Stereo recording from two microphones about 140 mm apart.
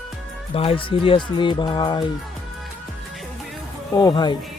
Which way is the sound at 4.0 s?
30° left (ahead or behind).